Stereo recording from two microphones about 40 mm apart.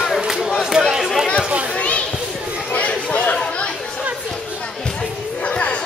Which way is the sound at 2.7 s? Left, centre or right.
Left.